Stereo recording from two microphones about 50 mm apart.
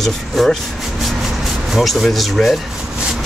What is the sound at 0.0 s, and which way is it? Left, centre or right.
Speech, centre.